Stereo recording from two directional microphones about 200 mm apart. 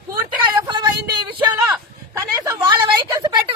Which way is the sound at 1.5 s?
15° right (ahead or behind).